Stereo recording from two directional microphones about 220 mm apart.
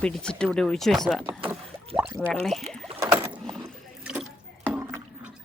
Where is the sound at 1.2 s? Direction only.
20° right (ahead or behind).